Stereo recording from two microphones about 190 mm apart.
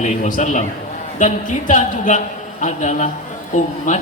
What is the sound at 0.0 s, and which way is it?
Speech, 40° left (ahead or behind).